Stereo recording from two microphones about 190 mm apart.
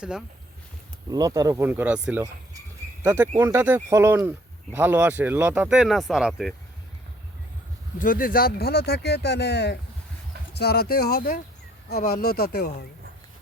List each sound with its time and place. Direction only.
0.0 s speech: 5° right (ahead or behind)
1.1 s speech: 20° right (ahead or behind); by 6.5 s centre (ahead or behind)
7.9 s speech: 45° left (ahead or behind)